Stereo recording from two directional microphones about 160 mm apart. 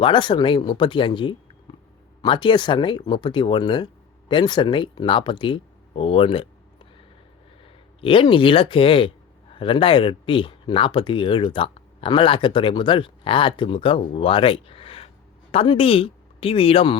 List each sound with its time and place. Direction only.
0.0 s speech: 30° left (ahead or behind)
8.0 s speech: 35° left (ahead or behind)